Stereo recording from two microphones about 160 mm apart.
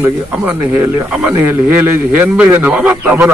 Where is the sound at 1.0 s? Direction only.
5° right (ahead or behind).